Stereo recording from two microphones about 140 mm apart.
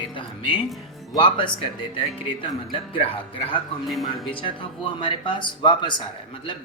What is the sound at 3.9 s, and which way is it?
Speech, centre (ahead or behind).